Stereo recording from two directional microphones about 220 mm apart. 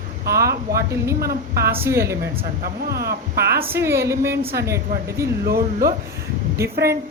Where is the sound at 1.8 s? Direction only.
10° right (ahead or behind).